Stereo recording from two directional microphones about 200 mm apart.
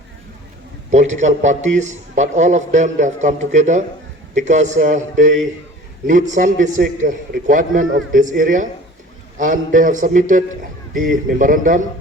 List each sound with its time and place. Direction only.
0.9 s a man's voice: 35° right (ahead or behind)